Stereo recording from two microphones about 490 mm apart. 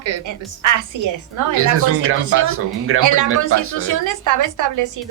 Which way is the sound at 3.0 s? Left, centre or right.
Right.